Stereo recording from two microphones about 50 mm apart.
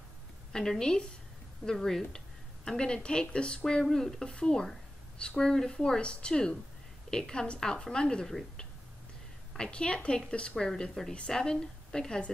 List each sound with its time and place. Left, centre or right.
0.5 s a woman's voice: centre
9.5 s a woman's voice: centre